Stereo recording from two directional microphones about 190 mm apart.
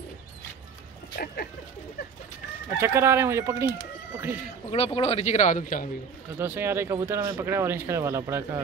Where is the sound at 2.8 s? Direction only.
15° right (ahead or behind).